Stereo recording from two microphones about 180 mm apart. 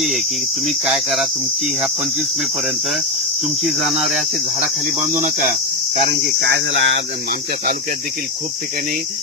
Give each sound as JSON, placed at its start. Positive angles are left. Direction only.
{"t": 0.8, "sound": "cricket", "side_deg": 0}
{"t": 3.6, "sound": "cricket", "side_deg": 0}
{"t": 6.4, "sound": "speech", "side_deg": -80}